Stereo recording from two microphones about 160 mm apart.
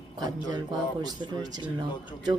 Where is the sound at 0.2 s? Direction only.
25° right (ahead or behind).